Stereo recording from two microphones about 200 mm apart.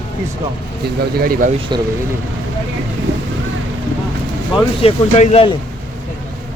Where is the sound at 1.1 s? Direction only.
45° right (ahead or behind).